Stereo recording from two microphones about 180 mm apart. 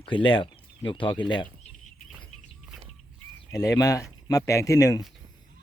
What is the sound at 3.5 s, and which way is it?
Speech, 20° left (ahead or behind).